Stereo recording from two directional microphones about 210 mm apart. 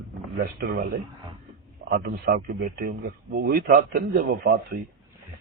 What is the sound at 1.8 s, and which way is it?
Speech, 50° right (ahead or behind).